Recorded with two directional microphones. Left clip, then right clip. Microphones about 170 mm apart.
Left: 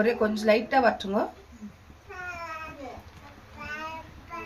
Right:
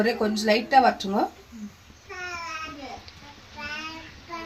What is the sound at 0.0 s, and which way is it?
Speech, 50° right (ahead or behind).